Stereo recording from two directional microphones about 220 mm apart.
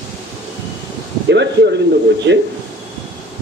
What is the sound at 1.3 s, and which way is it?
Speech, 50° right (ahead or behind).